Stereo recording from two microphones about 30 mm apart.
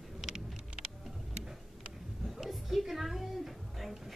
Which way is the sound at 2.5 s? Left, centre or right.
Centre.